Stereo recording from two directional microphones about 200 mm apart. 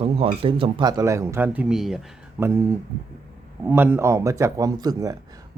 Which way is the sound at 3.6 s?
10° right (ahead or behind).